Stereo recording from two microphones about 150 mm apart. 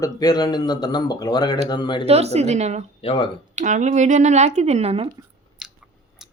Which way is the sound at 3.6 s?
55° right (ahead or behind).